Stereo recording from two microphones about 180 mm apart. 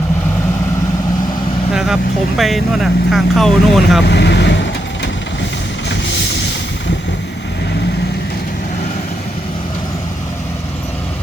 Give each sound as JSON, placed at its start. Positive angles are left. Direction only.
{"t": 1.7, "sound": "speech", "side_deg": 0}
{"t": 4.0, "sound": "vehicle", "side_deg": 70}